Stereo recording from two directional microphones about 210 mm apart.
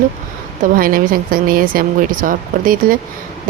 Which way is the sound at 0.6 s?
45° right (ahead or behind).